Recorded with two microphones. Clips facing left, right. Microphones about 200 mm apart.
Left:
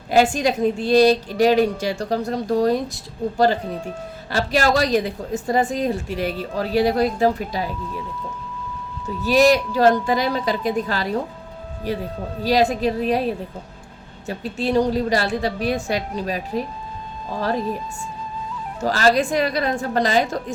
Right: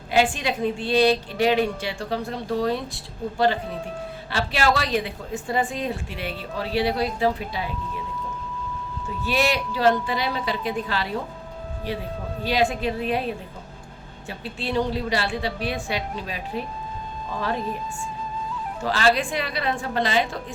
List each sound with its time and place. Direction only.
0.1 s a woman's voice: 40° left (ahead or behind)
9.2 s a woman's voice: 40° left (ahead or behind)
18.8 s speech: 40° left (ahead or behind)